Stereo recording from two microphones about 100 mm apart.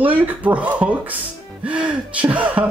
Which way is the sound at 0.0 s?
15° right (ahead or behind).